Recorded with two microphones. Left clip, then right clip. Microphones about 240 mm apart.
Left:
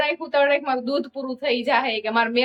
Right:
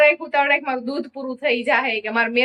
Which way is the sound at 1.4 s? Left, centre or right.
Centre.